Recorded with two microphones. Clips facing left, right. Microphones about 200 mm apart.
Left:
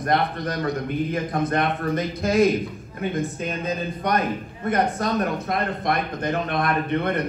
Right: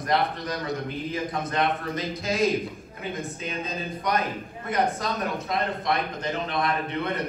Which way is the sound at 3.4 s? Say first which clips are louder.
Left 5 dB; 55° left (ahead or behind).